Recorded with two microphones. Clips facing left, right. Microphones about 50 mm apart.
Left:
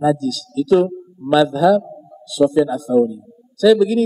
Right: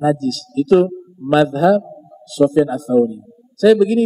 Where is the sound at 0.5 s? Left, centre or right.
Right.